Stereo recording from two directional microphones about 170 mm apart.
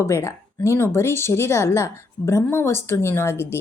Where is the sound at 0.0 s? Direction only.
15° left (ahead or behind).